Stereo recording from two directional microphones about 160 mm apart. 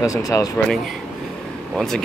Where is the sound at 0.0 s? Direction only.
20° left (ahead or behind).